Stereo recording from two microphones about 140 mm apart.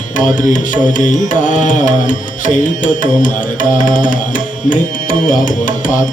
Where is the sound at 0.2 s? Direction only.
65° left (ahead or behind).